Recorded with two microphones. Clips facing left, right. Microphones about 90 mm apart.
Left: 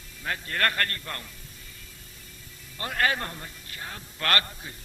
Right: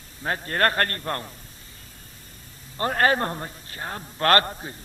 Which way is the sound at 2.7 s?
40° right (ahead or behind).